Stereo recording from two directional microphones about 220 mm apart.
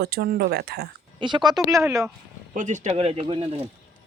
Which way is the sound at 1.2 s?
20° right (ahead or behind).